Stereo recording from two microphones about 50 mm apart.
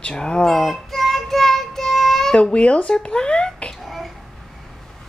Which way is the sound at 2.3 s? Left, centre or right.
Centre.